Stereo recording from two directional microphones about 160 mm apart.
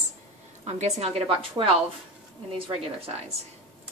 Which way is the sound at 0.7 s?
45° right (ahead or behind).